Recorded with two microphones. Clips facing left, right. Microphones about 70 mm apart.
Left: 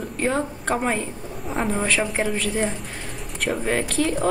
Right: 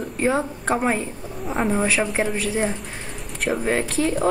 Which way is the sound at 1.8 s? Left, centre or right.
Centre.